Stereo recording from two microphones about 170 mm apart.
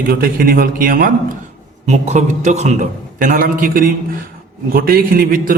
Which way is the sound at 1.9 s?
40° right (ahead or behind).